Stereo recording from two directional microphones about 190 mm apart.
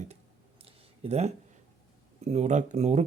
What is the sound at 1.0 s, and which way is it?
Speech, 35° right (ahead or behind).